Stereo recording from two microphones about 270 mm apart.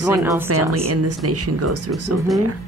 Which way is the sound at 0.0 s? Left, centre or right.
Centre.